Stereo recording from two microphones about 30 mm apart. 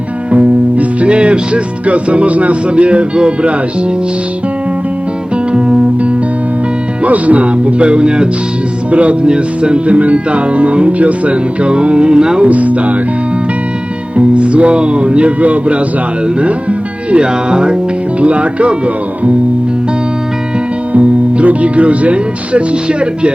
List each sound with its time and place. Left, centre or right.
0.3 s music: right
2.6 s speech: right
5.5 s music: right
7.0 s speech: right
8.9 s music: right
9.2 s music: right
11.6 s speech: right
12.5 s music: right
14.2 s speech: right
15.4 s music: right
17.5 s music: right
18.2 s speech: right
20.9 s speech: right